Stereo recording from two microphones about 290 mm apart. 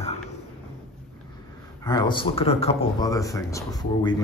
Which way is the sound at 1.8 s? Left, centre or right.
Centre.